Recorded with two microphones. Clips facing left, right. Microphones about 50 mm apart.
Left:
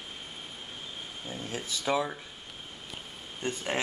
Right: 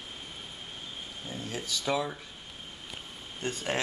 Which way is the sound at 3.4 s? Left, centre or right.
Centre.